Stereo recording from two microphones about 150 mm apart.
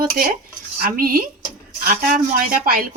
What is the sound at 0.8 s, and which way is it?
Speech, 75° right (ahead or behind).